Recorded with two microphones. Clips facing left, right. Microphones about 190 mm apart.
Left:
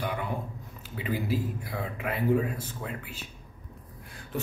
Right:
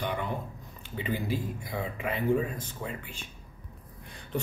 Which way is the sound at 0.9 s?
5° left (ahead or behind).